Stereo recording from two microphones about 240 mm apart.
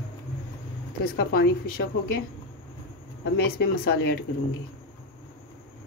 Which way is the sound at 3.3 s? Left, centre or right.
Left.